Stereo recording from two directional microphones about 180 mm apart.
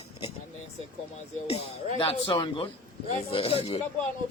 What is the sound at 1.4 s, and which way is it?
Speech, 35° left (ahead or behind).